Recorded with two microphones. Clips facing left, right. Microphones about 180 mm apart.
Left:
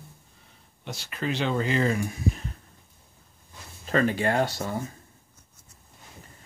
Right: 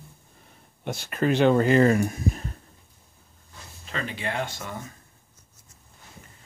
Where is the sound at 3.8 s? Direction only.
45° left (ahead or behind).